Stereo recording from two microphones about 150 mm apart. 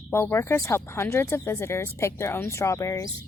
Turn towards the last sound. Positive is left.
turn(degrees=20)  # may be behind; listen again after turning